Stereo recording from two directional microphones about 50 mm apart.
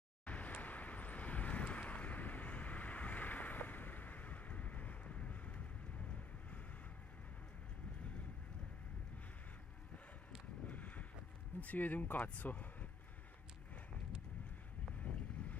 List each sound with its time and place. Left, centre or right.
0.2 s vehicle: left
10.7 s a sound: left
11.6 s speech: left
15.0 s boat: left